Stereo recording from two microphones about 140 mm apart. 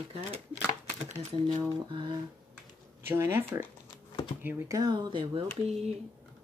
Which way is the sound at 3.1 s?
15° right (ahead or behind).